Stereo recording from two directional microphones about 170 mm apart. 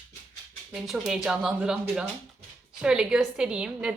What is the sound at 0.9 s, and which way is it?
A woman's voice, centre (ahead or behind).